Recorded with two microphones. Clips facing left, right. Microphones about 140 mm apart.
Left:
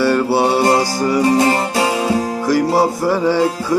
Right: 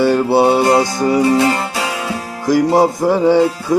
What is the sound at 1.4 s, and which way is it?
Music, 40° left (ahead or behind).